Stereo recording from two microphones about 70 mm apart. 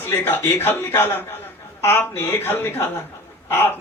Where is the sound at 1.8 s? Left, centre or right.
Left.